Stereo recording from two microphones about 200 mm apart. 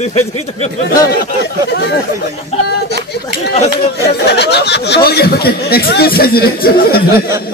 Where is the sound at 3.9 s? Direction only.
55° left (ahead or behind).